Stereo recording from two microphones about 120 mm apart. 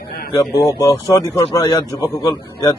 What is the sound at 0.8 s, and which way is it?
A man's voice, 30° left (ahead or behind).